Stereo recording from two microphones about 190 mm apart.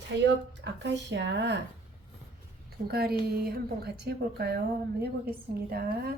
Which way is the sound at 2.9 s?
55° right (ahead or behind).